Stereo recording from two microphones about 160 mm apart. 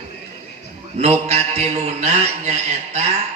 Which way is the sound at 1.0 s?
40° right (ahead or behind).